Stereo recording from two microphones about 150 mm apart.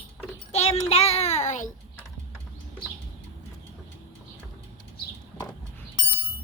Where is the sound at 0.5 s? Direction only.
45° left (ahead or behind).